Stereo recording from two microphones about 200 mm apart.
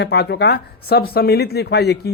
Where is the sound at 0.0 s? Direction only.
55° left (ahead or behind).